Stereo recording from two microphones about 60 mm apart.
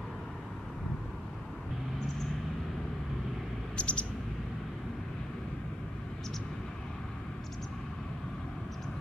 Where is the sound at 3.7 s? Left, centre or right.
Centre.